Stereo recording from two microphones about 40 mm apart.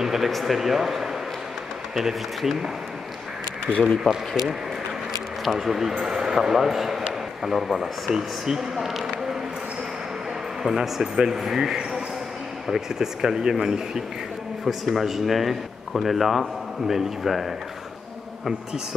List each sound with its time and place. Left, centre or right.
0.0 s a sound: centre
0.3 s speech: centre
3.7 s speech: left
5.4 s a man's voice: centre
10.6 s speech: centre
14.6 s speech: centre